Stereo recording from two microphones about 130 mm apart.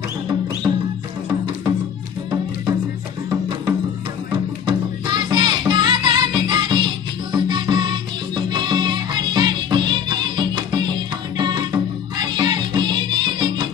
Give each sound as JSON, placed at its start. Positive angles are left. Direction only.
{"t": 4.6, "sound": "music", "side_deg": -35}